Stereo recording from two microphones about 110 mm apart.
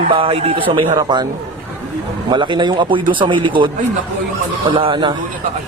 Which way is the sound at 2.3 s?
45° right (ahead or behind).